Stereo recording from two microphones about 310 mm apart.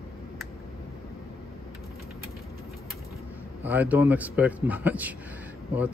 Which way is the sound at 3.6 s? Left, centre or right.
Centre.